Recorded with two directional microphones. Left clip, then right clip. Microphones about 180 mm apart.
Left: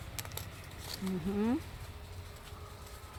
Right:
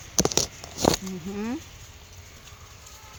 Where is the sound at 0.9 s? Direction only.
20° right (ahead or behind).